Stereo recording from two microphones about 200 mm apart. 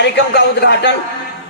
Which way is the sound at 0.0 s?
55° left (ahead or behind).